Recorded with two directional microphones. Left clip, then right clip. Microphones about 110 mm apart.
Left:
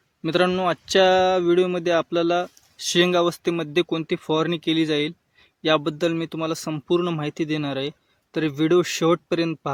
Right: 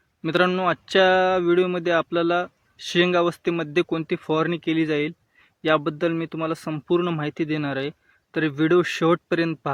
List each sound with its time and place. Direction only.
0.2 s speech: 25° left (ahead or behind)